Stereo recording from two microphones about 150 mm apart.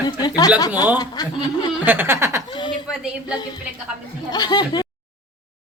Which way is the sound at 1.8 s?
10° right (ahead or behind).